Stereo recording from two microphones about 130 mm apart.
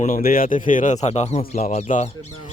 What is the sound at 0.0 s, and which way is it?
Speech, 90° left.